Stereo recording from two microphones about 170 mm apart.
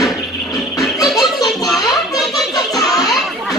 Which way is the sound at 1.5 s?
Centre (ahead or behind).